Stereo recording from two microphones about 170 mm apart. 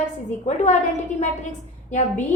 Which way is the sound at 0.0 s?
45° left (ahead or behind).